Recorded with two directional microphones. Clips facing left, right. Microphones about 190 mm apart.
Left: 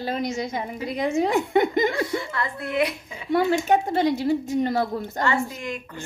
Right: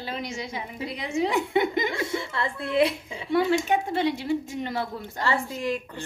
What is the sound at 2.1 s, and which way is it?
A woman's voice, 25° right (ahead or behind).